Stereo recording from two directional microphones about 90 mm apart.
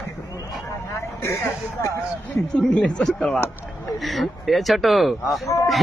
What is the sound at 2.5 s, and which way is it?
Speech, 10° left (ahead or behind).